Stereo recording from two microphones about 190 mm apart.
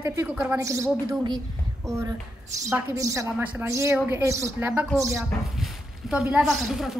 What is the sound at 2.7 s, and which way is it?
A woman's voice, 15° right (ahead or behind).